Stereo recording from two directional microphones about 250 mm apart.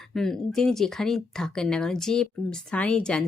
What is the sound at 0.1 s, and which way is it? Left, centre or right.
Speech, centre.